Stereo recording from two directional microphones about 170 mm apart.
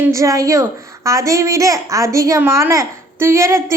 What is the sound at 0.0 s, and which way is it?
A woman's voice, 20° right (ahead or behind).